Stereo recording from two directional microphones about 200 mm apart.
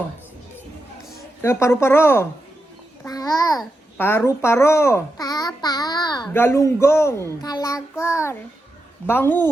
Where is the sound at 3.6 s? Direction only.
10° left (ahead or behind).